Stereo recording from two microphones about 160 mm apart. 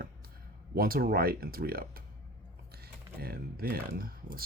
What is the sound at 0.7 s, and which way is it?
Speech, 65° right (ahead or behind).